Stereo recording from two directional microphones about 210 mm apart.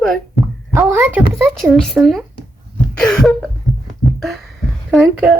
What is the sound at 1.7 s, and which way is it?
Speech, centre (ahead or behind).